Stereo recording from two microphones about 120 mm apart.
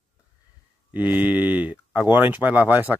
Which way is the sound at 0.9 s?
15° right (ahead or behind).